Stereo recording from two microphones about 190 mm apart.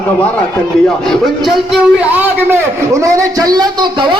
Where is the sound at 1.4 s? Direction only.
Centre (ahead or behind); by 4.2 s 25° right (ahead or behind).